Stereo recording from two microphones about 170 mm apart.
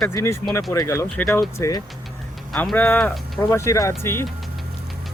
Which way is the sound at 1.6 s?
20° left (ahead or behind).